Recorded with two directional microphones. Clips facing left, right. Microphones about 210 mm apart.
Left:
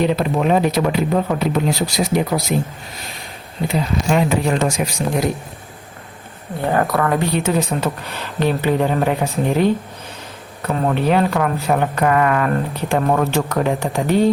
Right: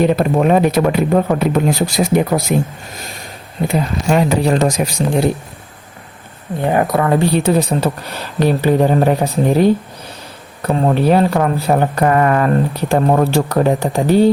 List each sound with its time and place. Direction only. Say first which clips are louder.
0.0 s speech: right 4 dB; 50° right (ahead or behind)
3.7 s speech: right 2 dB; 45° right (ahead or behind)
6.7 s speech: right 3 dB; 20° right (ahead or behind); by 14.3 s 35° right (ahead or behind)